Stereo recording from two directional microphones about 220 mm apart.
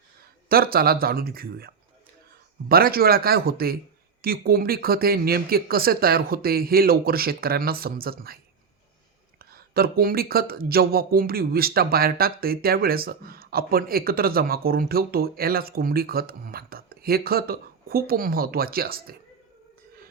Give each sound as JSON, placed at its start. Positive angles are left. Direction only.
{"t": 0.4, "sound": "speech", "side_deg": -40}
{"t": 9.4, "sound": "speech", "side_deg": -45}